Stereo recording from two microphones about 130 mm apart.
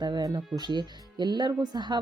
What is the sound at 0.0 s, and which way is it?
Speech, 30° right (ahead or behind).